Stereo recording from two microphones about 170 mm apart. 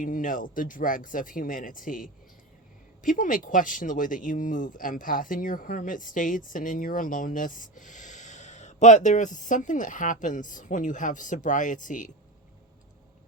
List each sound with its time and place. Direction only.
0.0 s speech: 50° left (ahead or behind)